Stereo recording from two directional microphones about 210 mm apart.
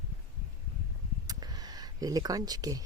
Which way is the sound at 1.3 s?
20° right (ahead or behind).